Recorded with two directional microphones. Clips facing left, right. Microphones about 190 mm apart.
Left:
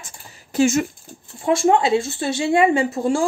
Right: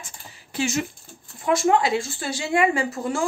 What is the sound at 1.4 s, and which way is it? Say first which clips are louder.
Speech: left 3 dB; 30° left (ahead or behind).